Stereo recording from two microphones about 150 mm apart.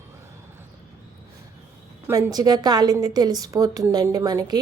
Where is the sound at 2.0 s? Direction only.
15° right (ahead or behind).